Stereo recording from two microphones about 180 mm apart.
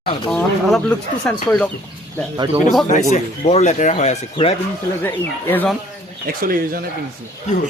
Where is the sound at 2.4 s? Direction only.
25° right (ahead or behind).